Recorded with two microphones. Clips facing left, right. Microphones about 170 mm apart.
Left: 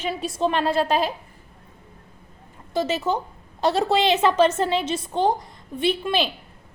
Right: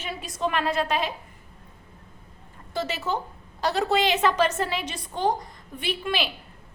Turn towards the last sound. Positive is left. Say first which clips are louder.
# left 6 dB
turn(degrees=25)  # may be behind; listen again after turning